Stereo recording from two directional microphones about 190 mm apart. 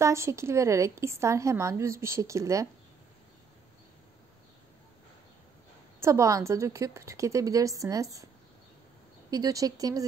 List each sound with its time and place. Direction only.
0.0 s speech: 15° right (ahead or behind)
5.9 s speech: 15° right (ahead or behind)
9.3 s speech: 20° right (ahead or behind)